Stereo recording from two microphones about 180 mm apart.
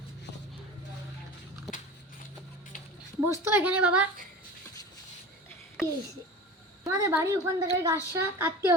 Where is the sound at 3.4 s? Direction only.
10° right (ahead or behind).